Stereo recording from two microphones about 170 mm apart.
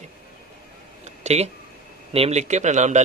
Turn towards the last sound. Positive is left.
turn(degrees=-45)  # may be behind; listen again after turning